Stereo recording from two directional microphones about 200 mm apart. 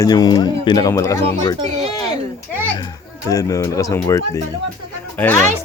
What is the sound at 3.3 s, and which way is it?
Speech, 15° left (ahead or behind).